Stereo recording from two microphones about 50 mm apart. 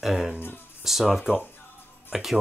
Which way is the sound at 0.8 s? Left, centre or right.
Centre.